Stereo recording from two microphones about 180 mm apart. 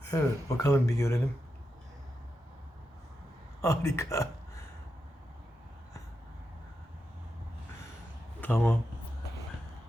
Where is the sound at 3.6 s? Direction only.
15° left (ahead or behind).